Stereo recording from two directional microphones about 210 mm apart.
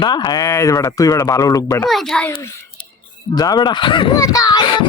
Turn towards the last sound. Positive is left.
turn(degrees=20)  # may be behind; listen again after turning